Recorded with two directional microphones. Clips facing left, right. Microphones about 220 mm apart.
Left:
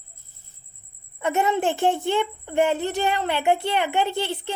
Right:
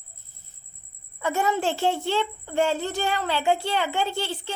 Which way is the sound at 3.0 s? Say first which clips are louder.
Left 2 dB; 20° left (ahead or behind).